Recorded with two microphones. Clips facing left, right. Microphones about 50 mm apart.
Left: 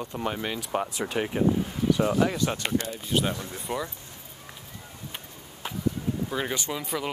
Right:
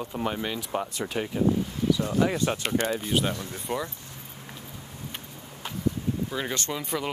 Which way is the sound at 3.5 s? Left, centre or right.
Centre.